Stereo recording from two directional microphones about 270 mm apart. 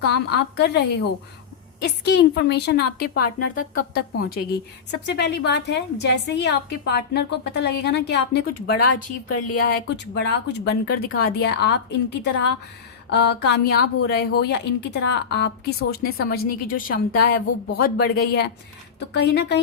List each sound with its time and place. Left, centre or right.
0.0 s a woman's voice: left